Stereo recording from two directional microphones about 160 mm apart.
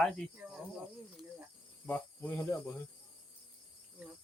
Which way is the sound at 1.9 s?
10° left (ahead or behind).